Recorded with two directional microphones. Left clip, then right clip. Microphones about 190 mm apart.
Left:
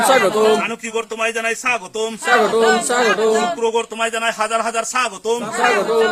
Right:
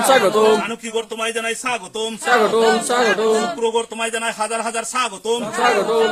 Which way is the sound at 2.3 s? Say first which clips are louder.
Left 1 dB; centre (ahead or behind).